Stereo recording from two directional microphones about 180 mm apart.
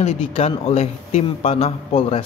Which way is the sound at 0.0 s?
30° left (ahead or behind).